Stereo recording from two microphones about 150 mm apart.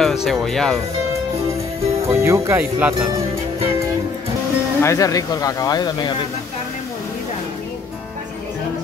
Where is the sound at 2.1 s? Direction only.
20° right (ahead or behind).